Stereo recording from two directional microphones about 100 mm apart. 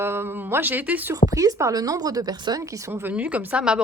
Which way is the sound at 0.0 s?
25° right (ahead or behind).